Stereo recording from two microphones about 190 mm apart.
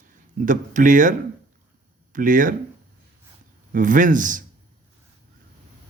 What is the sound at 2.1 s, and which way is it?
Speech, 45° right (ahead or behind).